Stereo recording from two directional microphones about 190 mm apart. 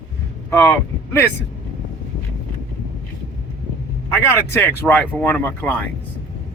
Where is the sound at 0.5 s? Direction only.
15° left (ahead or behind).